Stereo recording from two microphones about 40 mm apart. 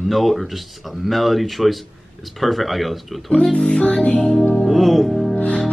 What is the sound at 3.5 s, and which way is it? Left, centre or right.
Music, left.